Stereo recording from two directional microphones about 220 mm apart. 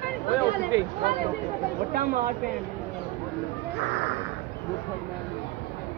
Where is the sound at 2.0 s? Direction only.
40° right (ahead or behind).